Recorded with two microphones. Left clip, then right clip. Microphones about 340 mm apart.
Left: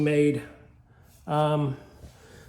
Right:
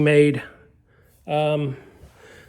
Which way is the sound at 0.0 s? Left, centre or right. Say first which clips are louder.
Right 7 dB; right.